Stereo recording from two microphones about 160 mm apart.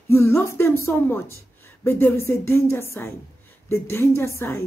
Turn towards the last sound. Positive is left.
turn(degrees=15)  # may be behind; listen again after turning